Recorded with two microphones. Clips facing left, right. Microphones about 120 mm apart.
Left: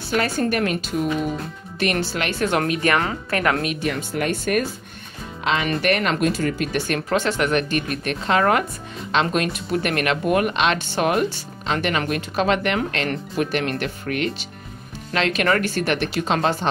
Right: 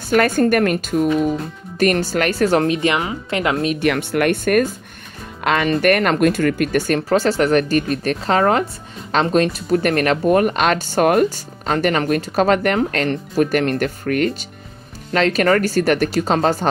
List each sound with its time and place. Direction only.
0.1 s speech: 50° right (ahead or behind)
2.6 s speech: 25° right (ahead or behind)
3.8 s speech: 70° right (ahead or behind)
6.9 s speech: 35° right (ahead or behind)